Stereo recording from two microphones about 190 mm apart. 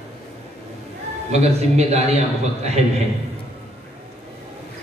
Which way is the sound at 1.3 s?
35° right (ahead or behind).